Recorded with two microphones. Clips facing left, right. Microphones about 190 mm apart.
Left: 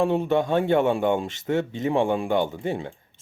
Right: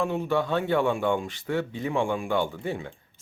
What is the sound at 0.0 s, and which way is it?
Speech, 25° left (ahead or behind).